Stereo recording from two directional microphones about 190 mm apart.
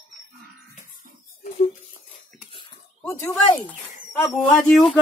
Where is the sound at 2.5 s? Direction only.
15° left (ahead or behind).